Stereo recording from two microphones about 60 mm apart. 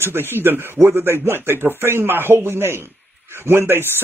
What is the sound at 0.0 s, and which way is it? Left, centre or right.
Speech, right.